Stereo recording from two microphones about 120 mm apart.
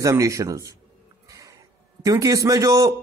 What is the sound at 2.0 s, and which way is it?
Speech, 30° right (ahead or behind).